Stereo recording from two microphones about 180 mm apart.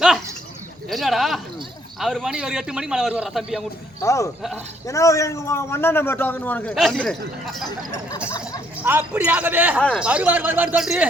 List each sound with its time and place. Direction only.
0.9 s a man's voice: centre (ahead or behind)
4.0 s a man's voice: 15° left (ahead or behind)
8.8 s speech: 10° right (ahead or behind)